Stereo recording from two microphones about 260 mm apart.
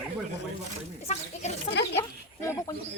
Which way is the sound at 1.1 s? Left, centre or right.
Left.